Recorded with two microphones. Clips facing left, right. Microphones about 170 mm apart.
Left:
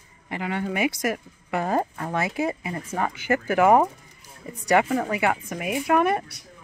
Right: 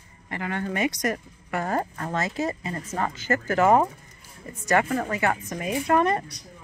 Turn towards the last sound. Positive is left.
turn(degrees=5)  # may be behind; listen again after turning